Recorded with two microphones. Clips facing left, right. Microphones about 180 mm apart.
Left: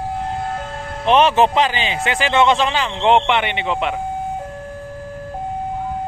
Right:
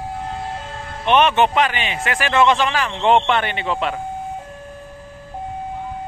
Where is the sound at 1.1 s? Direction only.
30° left (ahead or behind).